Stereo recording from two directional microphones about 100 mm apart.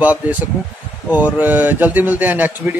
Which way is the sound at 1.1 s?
15° right (ahead or behind).